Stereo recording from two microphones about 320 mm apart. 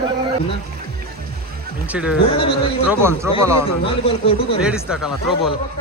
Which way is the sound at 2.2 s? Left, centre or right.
Centre.